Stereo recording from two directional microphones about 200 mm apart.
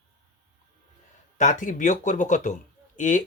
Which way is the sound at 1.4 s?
40° left (ahead or behind).